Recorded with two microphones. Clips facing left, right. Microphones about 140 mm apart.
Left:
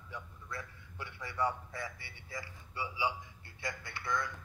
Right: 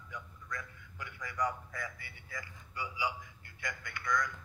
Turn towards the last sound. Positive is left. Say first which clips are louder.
# right 2 dB
turn(degrees=30)  # may be behind; listen again after turning